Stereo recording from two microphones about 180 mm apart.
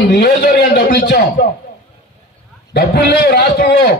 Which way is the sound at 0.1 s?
60° left (ahead or behind).